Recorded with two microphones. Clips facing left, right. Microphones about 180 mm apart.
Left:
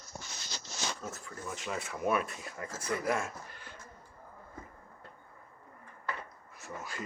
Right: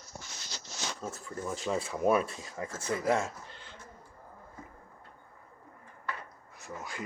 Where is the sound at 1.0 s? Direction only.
30° right (ahead or behind).